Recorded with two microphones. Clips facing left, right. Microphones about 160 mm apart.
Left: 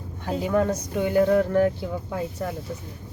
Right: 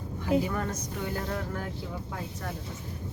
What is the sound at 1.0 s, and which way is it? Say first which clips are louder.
Speech: left 15 dB; 70° left (ahead or behind).